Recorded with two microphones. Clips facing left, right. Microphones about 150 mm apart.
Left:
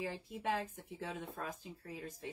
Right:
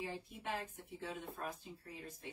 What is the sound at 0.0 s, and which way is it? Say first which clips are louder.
Speech: left 4 dB; 90° left.